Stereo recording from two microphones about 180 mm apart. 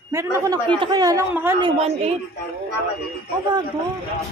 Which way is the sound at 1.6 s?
35° right (ahead or behind).